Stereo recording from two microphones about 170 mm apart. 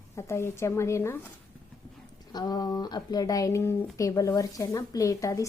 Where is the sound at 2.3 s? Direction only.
25° left (ahead or behind).